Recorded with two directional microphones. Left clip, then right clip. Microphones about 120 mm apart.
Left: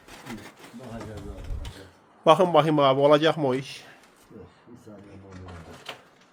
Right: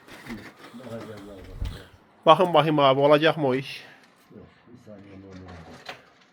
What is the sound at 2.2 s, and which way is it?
A man's voice, 30° left (ahead or behind).